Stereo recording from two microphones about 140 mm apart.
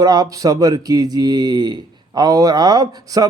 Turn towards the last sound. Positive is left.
turn(degrees=-25)  # may be behind; listen again after turning